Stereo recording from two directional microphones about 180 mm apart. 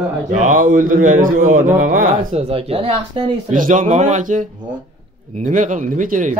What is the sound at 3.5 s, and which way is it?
Speech, 45° right (ahead or behind).